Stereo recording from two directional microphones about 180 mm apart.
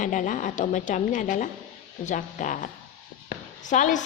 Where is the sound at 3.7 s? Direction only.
45° left (ahead or behind).